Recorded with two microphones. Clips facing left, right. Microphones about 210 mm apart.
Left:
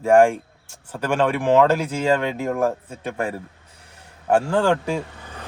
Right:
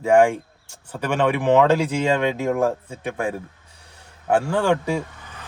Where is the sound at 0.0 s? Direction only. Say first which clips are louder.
Left 1 dB; 15° right (ahead or behind).